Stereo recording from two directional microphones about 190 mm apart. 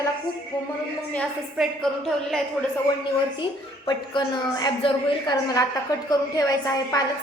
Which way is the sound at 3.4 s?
25° left (ahead or behind).